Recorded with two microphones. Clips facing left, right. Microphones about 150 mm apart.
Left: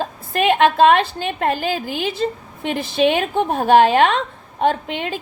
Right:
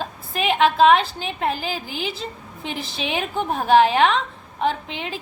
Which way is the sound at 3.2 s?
45° left (ahead or behind).